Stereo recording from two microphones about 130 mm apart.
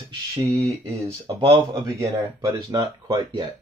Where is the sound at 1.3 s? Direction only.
35° right (ahead or behind).